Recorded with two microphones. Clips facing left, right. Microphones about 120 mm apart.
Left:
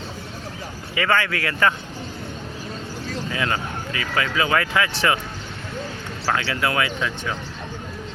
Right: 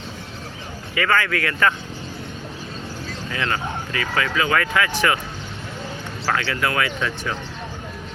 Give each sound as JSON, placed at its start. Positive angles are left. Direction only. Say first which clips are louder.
{"t": 0.9, "sound": "speech", "louder": "right 1 dB", "side_deg": 25}
{"t": 3.3, "sound": "speech", "louder": "right 2 dB", "side_deg": 20}
{"t": 6.2, "sound": "speech", "louder": "even", "side_deg": 15}